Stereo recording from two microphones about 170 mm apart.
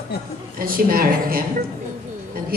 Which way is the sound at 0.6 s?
55° right (ahead or behind).